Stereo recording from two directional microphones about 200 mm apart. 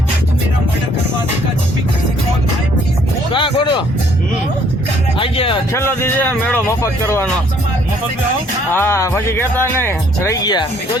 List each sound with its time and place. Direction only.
3.3 s a sound: 25° left (ahead or behind)
5.1 s music: 25° left (ahead or behind)
5.7 s speech: 10° left (ahead or behind)
8.7 s speech: 10° left (ahead or behind)